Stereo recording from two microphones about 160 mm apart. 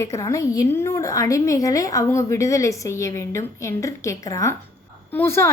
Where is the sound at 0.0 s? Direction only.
20° left (ahead or behind).